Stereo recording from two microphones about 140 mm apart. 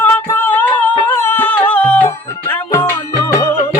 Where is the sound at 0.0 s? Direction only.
15° left (ahead or behind).